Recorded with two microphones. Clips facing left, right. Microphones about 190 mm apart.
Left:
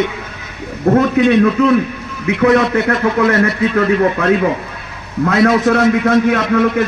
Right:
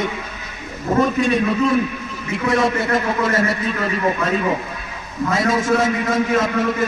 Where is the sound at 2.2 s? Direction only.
70° left (ahead or behind).